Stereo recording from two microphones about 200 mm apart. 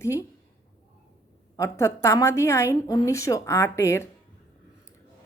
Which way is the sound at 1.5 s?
15° left (ahead or behind).